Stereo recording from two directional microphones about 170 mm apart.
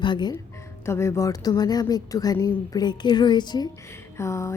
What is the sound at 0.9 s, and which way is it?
A woman's voice, 15° left (ahead or behind).